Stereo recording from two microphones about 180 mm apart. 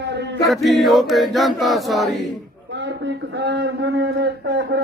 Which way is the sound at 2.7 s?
75° right (ahead or behind).